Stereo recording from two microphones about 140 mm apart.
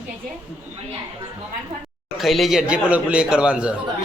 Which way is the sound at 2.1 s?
Centre (ahead or behind).